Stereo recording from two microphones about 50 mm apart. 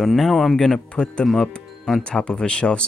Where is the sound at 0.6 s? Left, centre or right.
Centre.